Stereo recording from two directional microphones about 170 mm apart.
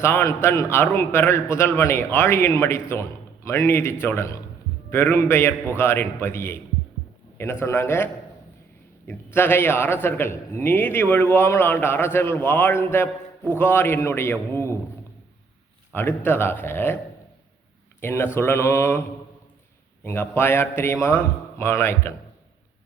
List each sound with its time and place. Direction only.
0.0 s a man's voice: 15° left (ahead or behind)
15.9 s a man's voice: 10° left (ahead or behind)
18.0 s a man's voice: 15° left (ahead or behind)
20.1 s a man's voice: 15° left (ahead or behind)